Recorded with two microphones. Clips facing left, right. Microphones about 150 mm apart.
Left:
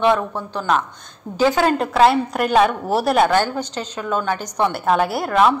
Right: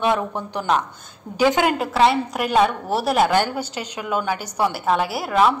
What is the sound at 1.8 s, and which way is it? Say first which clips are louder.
A woman's voice: left 3 dB; centre (ahead or behind).